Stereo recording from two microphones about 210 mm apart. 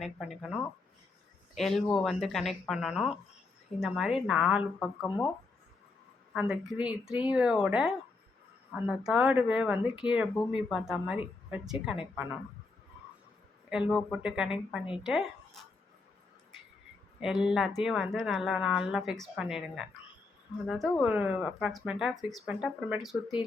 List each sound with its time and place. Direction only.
0.2 s speech: centre (ahead or behind)
1.5 s speech: centre (ahead or behind)
5.0 s speech: 20° left (ahead or behind)
6.3 s speech: 5° right (ahead or behind)
13.7 s speech: 5° right (ahead or behind)
17.2 s speech: centre (ahead or behind)